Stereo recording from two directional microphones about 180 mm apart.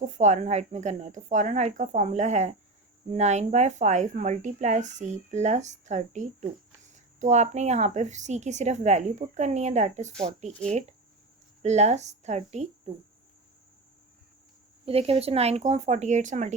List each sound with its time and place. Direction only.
0.2 s speech: 40° right (ahead or behind)
14.8 s speech: 35° right (ahead or behind)